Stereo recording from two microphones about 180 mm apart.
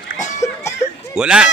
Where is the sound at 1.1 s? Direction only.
5° right (ahead or behind).